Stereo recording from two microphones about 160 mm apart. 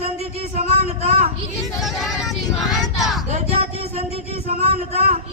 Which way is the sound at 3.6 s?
40° right (ahead or behind).